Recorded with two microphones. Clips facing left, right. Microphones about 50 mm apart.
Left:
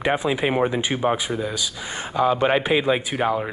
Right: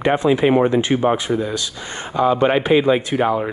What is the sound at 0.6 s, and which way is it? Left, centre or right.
Speech, centre.